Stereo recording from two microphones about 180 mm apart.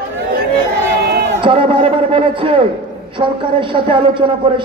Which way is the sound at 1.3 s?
30° right (ahead or behind).